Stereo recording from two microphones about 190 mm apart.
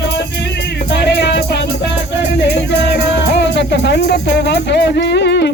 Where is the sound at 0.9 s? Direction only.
65° left (ahead or behind).